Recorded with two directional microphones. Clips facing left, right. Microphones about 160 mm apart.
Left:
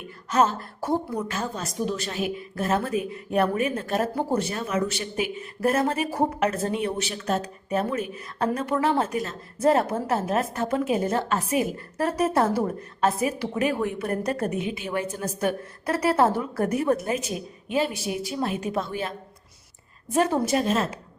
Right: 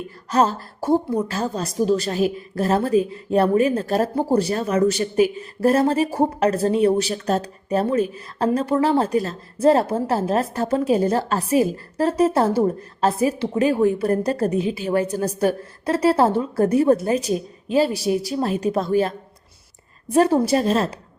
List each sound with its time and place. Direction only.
0.3 s a woman's voice: 35° right (ahead or behind)